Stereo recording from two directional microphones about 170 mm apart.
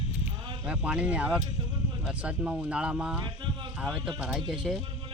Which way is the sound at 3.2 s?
25° right (ahead or behind).